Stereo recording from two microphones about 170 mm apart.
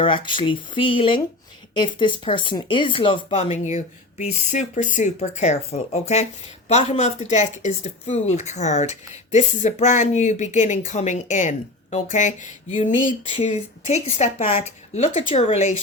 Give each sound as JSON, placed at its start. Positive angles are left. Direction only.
{"t": 0.0, "sound": "speech", "side_deg": 30}
{"t": 3.8, "sound": "a woman's voice", "side_deg": 45}